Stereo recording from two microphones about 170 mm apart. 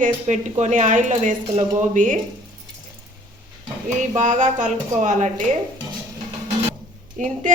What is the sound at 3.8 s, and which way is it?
A woman's voice, 45° right (ahead or behind).